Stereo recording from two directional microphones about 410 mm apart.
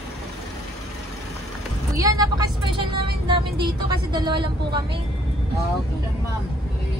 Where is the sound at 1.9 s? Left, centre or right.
Centre.